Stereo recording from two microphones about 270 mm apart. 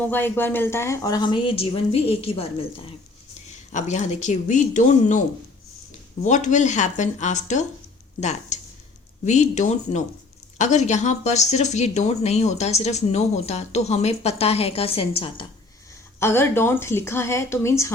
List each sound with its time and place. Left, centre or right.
0.0 s speech: centre
16.2 s speech: centre